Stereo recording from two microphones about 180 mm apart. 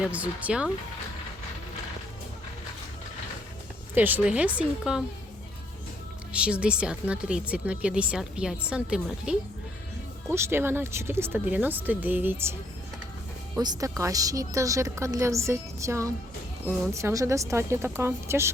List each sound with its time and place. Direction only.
0.1 s a woman's voice: 5° right (ahead or behind)
3.9 s a woman's voice: 10° right (ahead or behind)
6.3 s a woman's voice: 5° right (ahead or behind)
10.3 s a woman's voice: 15° right (ahead or behind)
13.6 s a woman's voice: 20° right (ahead or behind)